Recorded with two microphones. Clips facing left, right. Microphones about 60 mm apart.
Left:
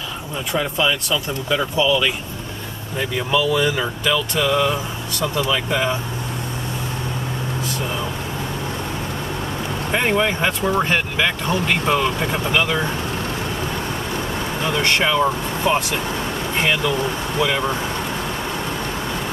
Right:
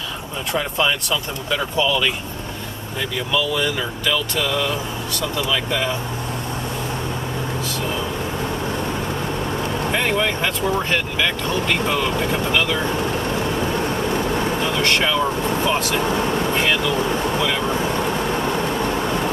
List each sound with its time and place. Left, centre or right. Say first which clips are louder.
0.5 s speech: even; centre
3.0 s speech: left 2 dB; left
9.9 s speech: left 3 dB; centre
14.8 s speech: left 3 dB; centre